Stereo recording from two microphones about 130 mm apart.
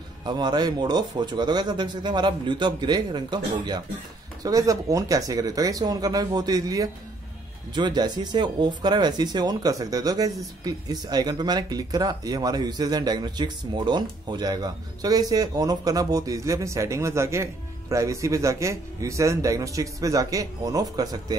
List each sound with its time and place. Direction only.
0.2 s speech: 35° right (ahead or behind)